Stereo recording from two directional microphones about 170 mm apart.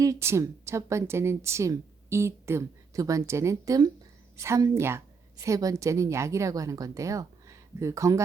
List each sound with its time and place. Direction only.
0.0 s a woman's voice: 15° right (ahead or behind)